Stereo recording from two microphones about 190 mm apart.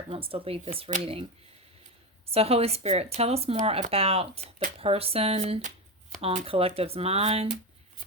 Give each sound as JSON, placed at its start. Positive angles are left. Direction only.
{"t": 0.1, "sound": "speech", "side_deg": -30}
{"t": 2.2, "sound": "speech", "side_deg": -30}